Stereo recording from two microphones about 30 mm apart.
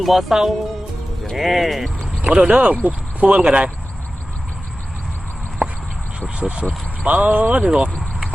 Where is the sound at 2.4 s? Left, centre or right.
Right.